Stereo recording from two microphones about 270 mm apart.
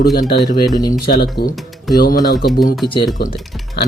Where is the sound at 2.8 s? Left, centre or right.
Centre.